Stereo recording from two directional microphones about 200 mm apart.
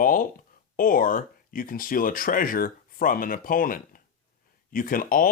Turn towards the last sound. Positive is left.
turn(degrees=45)  # may be behind; listen again after turning